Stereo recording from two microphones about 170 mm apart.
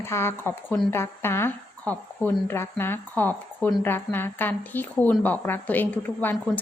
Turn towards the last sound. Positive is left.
turn(degrees=10)  # may be behind; listen again after turning